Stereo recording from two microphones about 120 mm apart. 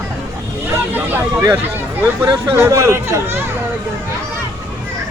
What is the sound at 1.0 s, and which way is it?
Speech, 15° right (ahead or behind).